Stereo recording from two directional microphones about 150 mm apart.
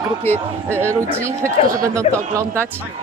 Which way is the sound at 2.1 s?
50° left (ahead or behind).